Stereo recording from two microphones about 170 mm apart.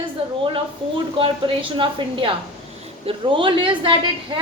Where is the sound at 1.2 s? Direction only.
30° right (ahead or behind).